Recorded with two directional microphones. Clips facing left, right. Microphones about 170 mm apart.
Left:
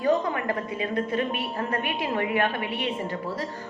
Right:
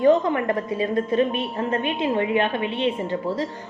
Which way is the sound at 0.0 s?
25° right (ahead or behind).